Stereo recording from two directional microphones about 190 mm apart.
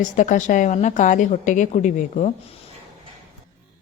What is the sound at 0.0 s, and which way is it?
A woman's voice, 40° left (ahead or behind).